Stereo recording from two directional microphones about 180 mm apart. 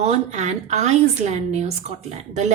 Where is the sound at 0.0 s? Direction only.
40° right (ahead or behind).